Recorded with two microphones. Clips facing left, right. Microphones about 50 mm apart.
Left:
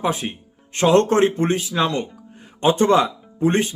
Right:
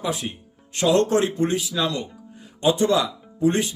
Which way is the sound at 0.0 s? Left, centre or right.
Left.